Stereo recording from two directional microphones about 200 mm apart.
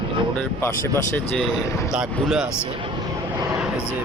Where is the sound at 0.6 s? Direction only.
10° left (ahead or behind).